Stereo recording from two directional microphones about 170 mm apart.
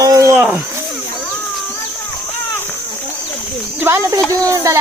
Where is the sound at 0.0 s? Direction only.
20° right (ahead or behind).